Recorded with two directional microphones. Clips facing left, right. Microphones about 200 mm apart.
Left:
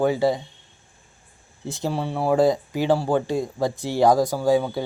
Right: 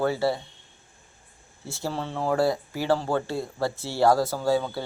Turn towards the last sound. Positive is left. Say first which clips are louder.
# left 4 dB
turn(degrees=15)  # may be behind; listen again after turning